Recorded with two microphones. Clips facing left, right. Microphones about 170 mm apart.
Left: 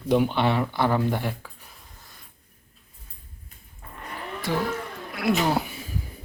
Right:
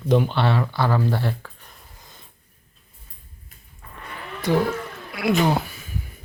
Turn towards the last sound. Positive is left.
turn(degrees=0)  # may be behind; listen again after turning